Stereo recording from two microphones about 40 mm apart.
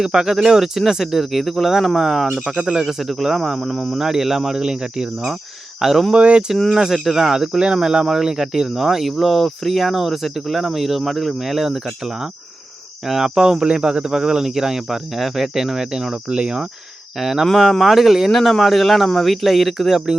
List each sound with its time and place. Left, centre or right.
0.0 s speech: centre
5.8 s speech: centre
6.1 s speech: right
6.7 s speech: centre
17.2 s speech: centre
17.4 s speech: centre